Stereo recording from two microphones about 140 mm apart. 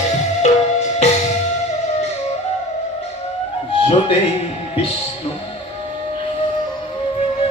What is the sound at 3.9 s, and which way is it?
Music, 35° left (ahead or behind).